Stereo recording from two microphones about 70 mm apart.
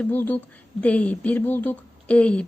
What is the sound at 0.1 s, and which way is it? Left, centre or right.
Speech, left.